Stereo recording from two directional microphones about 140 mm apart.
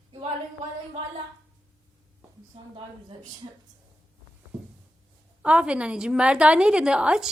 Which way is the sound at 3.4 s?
35° right (ahead or behind).